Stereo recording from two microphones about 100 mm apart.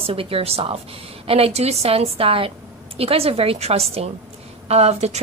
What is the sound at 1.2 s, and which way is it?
A woman's voice, 75° right (ahead or behind).